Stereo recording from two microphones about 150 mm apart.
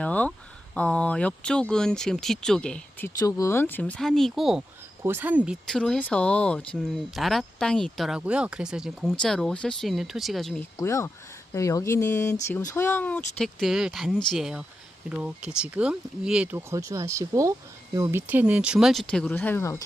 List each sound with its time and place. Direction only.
0.0 s speech: 10° left (ahead or behind)
3.1 s speech: 20° left (ahead or behind); by 4.6 s centre (ahead or behind)
5.0 s speech: 15° right (ahead or behind)
5.6 s speech: 5° left (ahead or behind)
10.8 s speech: 20° left (ahead or behind)